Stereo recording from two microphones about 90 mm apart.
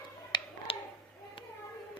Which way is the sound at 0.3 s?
55° left (ahead or behind).